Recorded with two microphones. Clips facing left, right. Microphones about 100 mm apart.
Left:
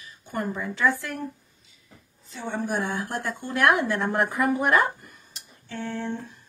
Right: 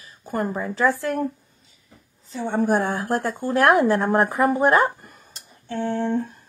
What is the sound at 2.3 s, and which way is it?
A woman's voice, 45° right (ahead or behind).